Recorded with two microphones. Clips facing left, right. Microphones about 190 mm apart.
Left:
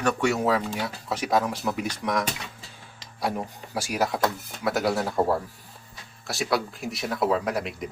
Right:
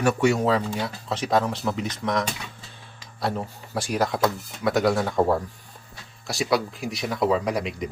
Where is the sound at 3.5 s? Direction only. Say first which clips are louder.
Right 3 dB; 10° left (ahead or behind).